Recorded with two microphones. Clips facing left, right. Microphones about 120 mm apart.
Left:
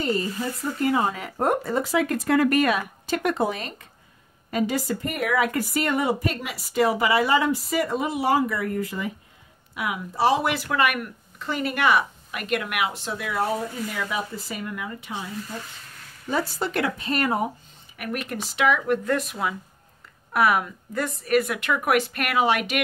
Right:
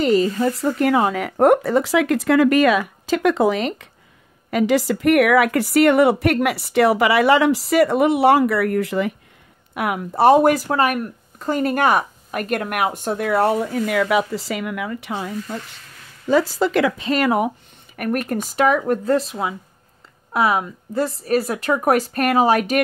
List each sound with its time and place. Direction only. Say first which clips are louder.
0.0 s a woman's voice: right 9 dB; 90° right
9.8 s speech: right 6 dB; 55° right (ahead or behind)
16.3 s speech: right 9 dB; 90° right
17.9 s a woman's voice: right 8 dB; 50° right (ahead or behind)